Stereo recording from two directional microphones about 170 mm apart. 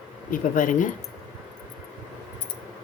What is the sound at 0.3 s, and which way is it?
Speech, 50° left (ahead or behind).